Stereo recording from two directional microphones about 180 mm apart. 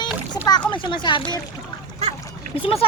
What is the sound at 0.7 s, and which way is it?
Speech, 25° left (ahead or behind).